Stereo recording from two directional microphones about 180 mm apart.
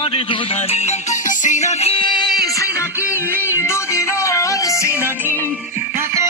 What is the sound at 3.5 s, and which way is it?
Music, 15° left (ahead or behind).